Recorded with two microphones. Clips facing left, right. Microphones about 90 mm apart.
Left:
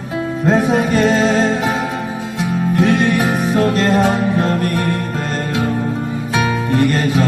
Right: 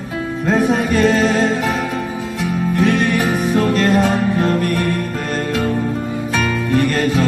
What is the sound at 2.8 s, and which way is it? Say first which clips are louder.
Music: left 1 dB; 30° left (ahead or behind).